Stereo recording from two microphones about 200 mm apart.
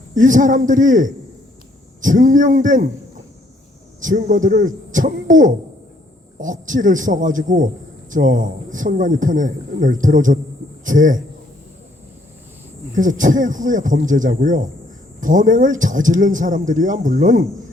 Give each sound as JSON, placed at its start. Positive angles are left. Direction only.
{"t": 0.1, "sound": "a man's voice", "side_deg": -40}
{"t": 4.0, "sound": "a man's voice", "side_deg": -40}
{"t": 12.9, "sound": "a man's voice", "side_deg": -40}